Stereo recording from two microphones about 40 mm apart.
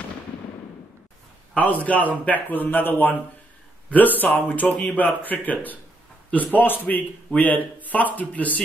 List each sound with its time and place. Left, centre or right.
1.6 s a man's voice: left
4.7 s speech: left
5.0 s a man's voice: left